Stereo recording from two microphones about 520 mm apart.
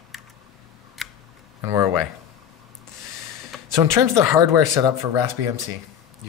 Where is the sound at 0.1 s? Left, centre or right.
Centre.